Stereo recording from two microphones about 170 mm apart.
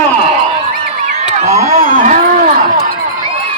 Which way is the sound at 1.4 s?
50° right (ahead or behind).